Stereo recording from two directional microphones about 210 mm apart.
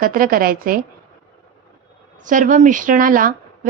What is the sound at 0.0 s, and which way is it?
Speech, 45° right (ahead or behind).